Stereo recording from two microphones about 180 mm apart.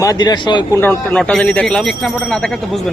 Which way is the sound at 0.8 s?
10° left (ahead or behind).